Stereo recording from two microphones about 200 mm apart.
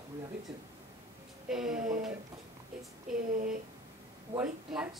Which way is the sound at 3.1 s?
45° right (ahead or behind).